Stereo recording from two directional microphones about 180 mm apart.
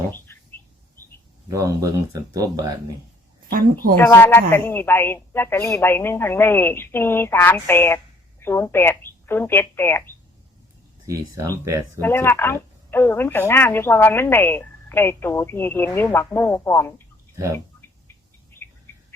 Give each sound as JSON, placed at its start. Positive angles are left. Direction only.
{"t": 1.5, "sound": "speech", "side_deg": -20}
{"t": 3.9, "sound": "a woman's voice", "side_deg": 15}
{"t": 11.0, "sound": "speech", "side_deg": -20}
{"t": 11.9, "sound": "a woman's voice", "side_deg": 10}
{"t": 18.5, "sound": "bird", "side_deg": 10}